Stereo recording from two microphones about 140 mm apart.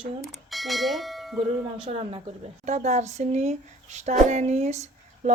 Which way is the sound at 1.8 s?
40° right (ahead or behind).